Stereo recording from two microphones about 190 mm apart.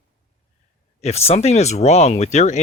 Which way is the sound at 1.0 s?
35° left (ahead or behind).